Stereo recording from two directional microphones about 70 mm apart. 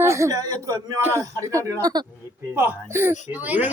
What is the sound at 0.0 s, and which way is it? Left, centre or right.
Speech, right.